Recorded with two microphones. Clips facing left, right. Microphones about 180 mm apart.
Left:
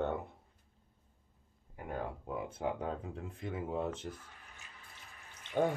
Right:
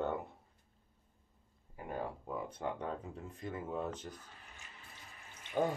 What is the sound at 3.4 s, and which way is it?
Speech, 25° left (ahead or behind).